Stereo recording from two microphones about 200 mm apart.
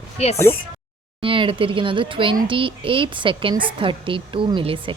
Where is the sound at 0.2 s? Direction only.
35° left (ahead or behind).